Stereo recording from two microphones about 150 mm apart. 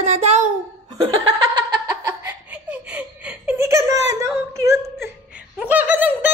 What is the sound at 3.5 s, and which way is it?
Whimper, 20° right (ahead or behind).